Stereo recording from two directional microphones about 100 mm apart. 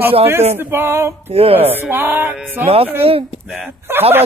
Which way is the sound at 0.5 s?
20° right (ahead or behind).